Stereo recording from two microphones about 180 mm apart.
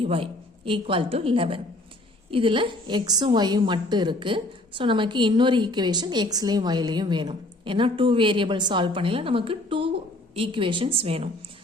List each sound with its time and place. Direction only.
0.0 s a woman's voice: 30° right (ahead or behind)